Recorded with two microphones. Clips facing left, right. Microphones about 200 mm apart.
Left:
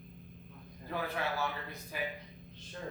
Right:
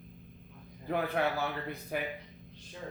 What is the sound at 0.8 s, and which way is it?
A man's voice, 55° right (ahead or behind).